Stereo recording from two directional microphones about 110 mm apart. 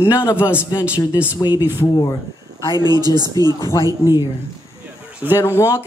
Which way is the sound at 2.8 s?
40° right (ahead or behind).